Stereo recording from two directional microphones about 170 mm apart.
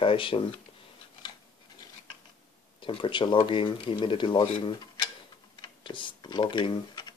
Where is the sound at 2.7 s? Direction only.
30° left (ahead or behind).